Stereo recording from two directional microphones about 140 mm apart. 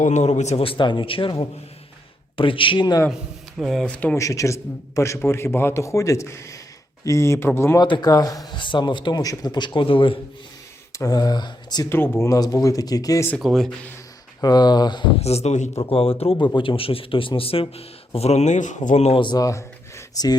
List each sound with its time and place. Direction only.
0.0 s speech: 55° left (ahead or behind); by 3.0 s 30° left (ahead or behind)
3.6 s speech: centre (ahead or behind)
4.2 s a man's voice: 25° left (ahead or behind)
7.8 s speech: 30° left (ahead or behind)
10.9 s speech: 25° left (ahead or behind)
11.9 s speech: 15° left (ahead or behind)
12.2 s a man's voice: 25° left (ahead or behind)
13.4 s speech: centre (ahead or behind)
14.4 s a man's voice: 30° left (ahead or behind)
15.2 s a man's voice: 50° left (ahead or behind)
15.8 s a man's voice: 40° left (ahead or behind)
19.1 s a man's voice: 35° left (ahead or behind)